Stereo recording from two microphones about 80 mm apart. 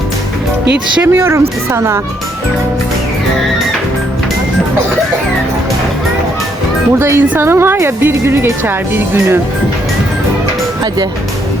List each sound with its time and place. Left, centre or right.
1.0 s speech: right
7.0 s speech: right